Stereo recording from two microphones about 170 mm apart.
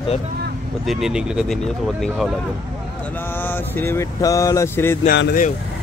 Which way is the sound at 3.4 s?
10° left (ahead or behind).